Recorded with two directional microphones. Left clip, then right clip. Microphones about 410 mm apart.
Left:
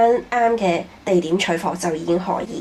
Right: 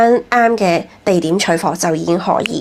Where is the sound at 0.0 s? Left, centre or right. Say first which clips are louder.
Right 5 dB; right.